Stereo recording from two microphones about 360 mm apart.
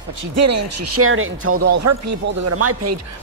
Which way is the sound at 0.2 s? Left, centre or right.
Right.